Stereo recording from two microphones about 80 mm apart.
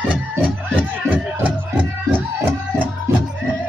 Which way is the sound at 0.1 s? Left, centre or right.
Centre.